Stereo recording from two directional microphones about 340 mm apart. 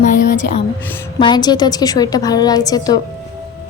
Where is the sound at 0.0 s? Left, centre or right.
Left.